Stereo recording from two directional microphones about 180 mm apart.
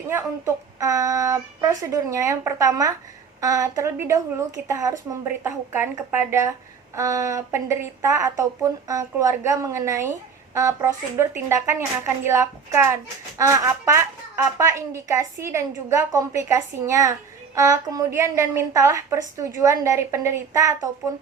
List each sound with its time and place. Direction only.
0.1 s a woman's voice: 15° right (ahead or behind)